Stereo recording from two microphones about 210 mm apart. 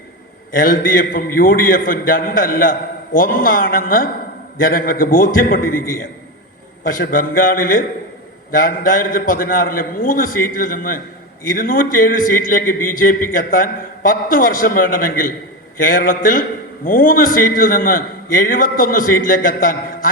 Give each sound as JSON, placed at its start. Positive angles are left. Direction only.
{"t": 0.5, "sound": "a man's voice", "side_deg": 40}